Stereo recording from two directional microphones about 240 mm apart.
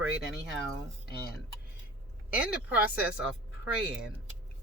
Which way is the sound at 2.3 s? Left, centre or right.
Centre.